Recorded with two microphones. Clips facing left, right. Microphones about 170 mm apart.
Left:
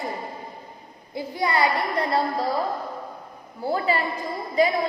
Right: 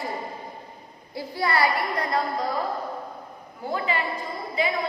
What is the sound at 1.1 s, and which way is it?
A child's voice, 20° left (ahead or behind).